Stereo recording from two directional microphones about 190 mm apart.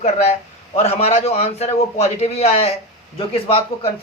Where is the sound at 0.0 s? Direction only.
35° left (ahead or behind).